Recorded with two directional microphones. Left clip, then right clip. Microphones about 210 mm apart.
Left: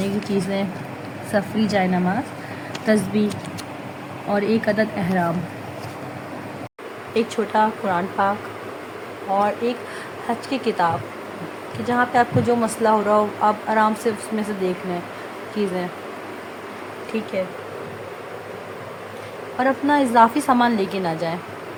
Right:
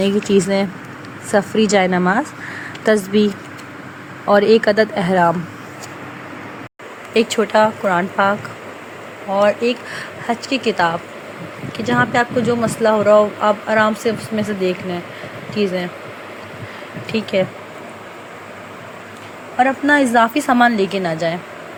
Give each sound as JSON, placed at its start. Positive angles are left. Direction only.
{"t": 0.3, "sound": "speech", "side_deg": -30}
{"t": 4.3, "sound": "speech", "side_deg": -40}
{"t": 7.1, "sound": "speech", "side_deg": -20}
{"t": 9.4, "sound": "speech", "side_deg": -20}
{"t": 17.1, "sound": "speech", "side_deg": -20}
{"t": 19.5, "sound": "speech", "side_deg": -15}